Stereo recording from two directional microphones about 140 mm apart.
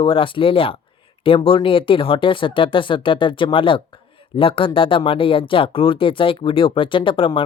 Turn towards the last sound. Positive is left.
turn(degrees=35)  # may be behind; listen again after turning